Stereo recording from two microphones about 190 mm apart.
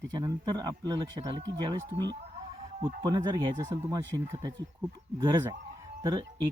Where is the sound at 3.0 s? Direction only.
20° right (ahead or behind).